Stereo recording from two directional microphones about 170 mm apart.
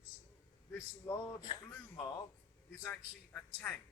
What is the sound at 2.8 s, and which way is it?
Speech, 10° left (ahead or behind).